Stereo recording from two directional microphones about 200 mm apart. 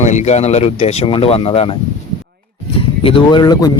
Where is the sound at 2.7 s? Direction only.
25° left (ahead or behind).